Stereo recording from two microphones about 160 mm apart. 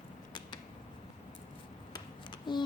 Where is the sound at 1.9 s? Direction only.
30° left (ahead or behind).